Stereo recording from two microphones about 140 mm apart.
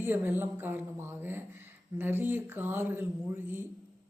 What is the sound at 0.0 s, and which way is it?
A woman's voice, 15° right (ahead or behind).